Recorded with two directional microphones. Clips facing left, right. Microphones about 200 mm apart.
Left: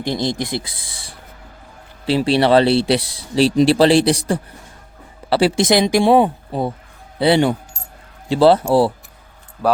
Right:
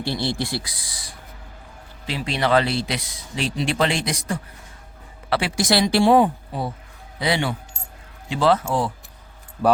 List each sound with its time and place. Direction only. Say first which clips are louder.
0.0 s speech: left 4 dB; 15° left (ahead or behind)
7.2 s speech: left 9 dB; 30° left (ahead or behind)